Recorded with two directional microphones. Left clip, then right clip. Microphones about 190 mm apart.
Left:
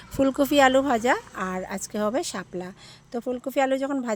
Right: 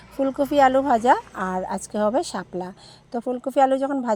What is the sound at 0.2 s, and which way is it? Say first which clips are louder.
Speech: right 1 dB; 25° left (ahead or behind).